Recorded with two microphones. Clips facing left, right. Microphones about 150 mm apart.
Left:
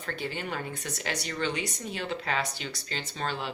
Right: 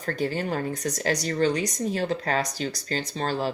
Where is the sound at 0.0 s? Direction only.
40° right (ahead or behind).